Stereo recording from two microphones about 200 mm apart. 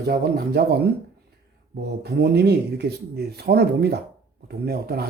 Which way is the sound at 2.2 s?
55° right (ahead or behind).